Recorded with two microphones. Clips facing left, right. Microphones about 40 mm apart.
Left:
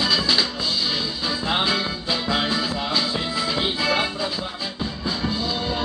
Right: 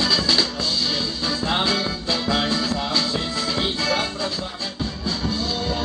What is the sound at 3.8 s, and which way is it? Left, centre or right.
Music, centre.